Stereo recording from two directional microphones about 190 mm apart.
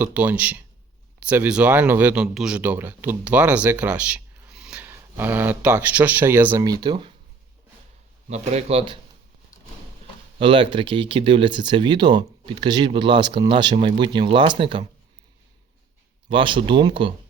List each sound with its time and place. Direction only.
0.0 s speech: 5° right (ahead or behind); by 7.1 s 25° right (ahead or behind)
8.3 s speech: 35° right (ahead or behind)
10.3 s speech: 25° right (ahead or behind)
16.3 s speech: 25° right (ahead or behind)